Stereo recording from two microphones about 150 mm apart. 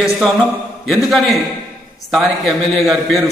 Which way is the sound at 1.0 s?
Centre (ahead or behind).